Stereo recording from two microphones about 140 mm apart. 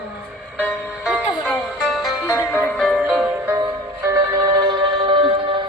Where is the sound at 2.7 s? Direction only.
Centre (ahead or behind).